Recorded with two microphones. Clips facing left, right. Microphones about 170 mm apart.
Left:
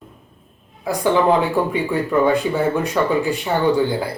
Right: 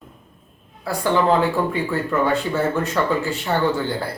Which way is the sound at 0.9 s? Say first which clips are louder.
Left 2 dB; 15° left (ahead or behind).